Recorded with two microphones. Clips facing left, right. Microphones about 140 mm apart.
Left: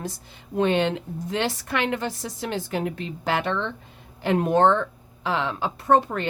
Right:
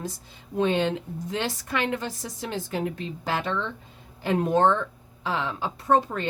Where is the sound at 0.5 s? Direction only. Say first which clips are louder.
Left 2 dB; 70° left (ahead or behind).